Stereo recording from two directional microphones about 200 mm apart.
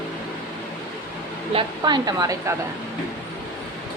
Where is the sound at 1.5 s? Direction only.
20° right (ahead or behind).